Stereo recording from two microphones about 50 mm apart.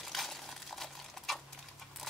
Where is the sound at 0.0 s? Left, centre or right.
Centre.